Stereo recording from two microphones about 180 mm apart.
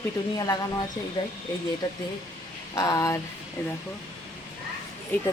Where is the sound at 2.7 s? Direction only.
20° left (ahead or behind).